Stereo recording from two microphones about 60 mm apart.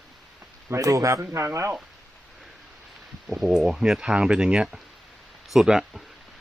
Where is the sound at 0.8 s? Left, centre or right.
Right.